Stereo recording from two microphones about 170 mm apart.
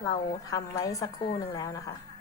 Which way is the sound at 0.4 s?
20° left (ahead or behind).